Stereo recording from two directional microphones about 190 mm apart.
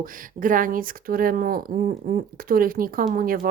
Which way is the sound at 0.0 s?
45° right (ahead or behind).